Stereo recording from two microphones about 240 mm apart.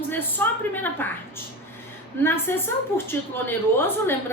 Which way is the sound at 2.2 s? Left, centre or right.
Centre.